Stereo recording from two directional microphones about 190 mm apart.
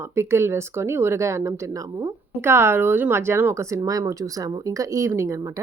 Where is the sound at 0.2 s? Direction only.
15° right (ahead or behind).